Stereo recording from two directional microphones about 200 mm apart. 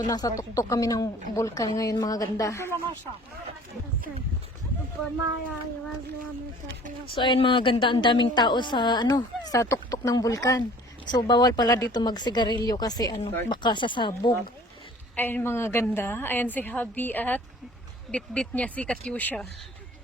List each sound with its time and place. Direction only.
0.1 s a woman's voice: 20° left (ahead or behind)
7.1 s a woman's voice: 25° left (ahead or behind)
15.1 s a woman's voice: 10° left (ahead or behind)